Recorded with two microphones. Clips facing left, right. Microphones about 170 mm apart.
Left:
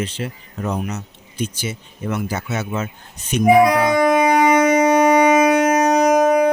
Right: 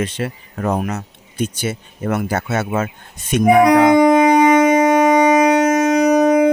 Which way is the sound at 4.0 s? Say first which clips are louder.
Right 4 dB; 20° right (ahead or behind).